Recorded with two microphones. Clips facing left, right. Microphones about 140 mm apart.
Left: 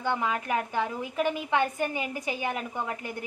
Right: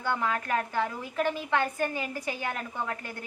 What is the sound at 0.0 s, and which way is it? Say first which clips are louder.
A woman's voice: left 1 dB; 15° left (ahead or behind).